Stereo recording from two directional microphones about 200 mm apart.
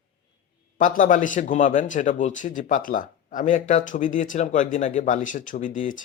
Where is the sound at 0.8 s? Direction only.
40° left (ahead or behind).